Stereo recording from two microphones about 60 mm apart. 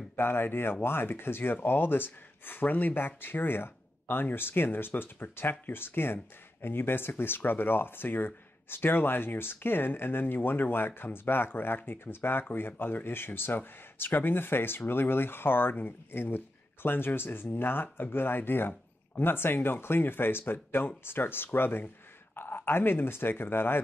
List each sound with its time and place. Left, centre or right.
0.1 s speech: left